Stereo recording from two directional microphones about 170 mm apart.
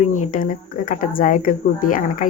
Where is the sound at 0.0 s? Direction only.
45° left (ahead or behind).